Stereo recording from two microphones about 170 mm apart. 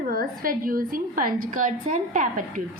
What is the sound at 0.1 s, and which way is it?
A woman's voice, 55° right (ahead or behind).